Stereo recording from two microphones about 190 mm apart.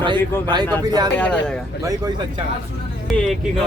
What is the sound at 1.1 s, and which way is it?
Speech, 5° left (ahead or behind).